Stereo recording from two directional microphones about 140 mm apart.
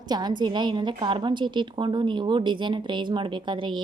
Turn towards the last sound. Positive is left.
turn(degrees=-35)  # may be behind; listen again after turning